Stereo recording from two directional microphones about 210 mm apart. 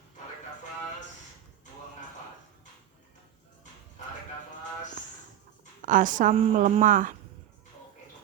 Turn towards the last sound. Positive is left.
turn(degrees=-40)  # may be behind; listen again after turning